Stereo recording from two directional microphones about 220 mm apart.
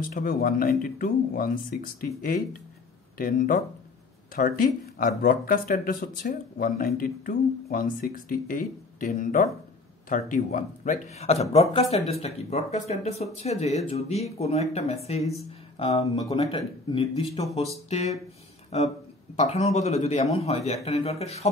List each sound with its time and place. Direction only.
0.0 s speech: 40° left (ahead or behind)
3.2 s speech: 40° left (ahead or behind)